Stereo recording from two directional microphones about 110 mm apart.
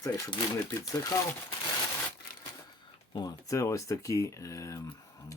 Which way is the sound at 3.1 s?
35° left (ahead or behind).